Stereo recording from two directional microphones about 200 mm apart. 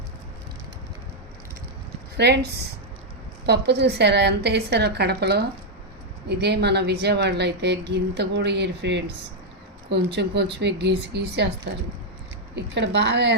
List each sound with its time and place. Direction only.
2.1 s a woman's voice: 55° right (ahead or behind)